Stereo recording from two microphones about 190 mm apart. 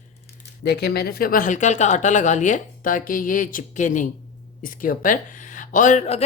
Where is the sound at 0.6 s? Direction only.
60° left (ahead or behind).